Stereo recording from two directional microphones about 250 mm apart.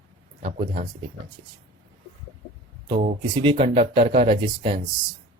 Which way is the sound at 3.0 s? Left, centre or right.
Right.